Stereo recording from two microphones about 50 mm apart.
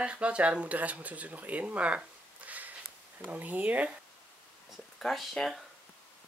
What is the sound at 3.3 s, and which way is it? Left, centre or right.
Speech, right.